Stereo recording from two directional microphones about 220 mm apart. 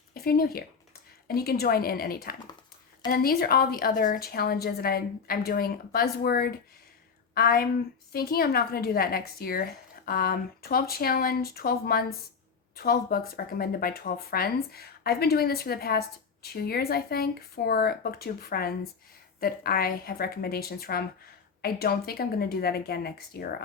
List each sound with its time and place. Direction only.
0.1 s speech: 40° left (ahead or behind)